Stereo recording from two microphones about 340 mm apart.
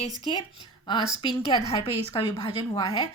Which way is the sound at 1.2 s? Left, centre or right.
Centre.